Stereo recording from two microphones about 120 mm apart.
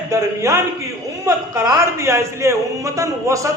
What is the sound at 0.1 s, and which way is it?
A man's voice, 25° right (ahead or behind).